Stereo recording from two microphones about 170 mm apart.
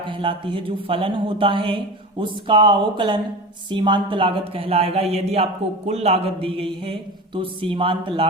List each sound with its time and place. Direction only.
0.1 s speech: 30° right (ahead or behind)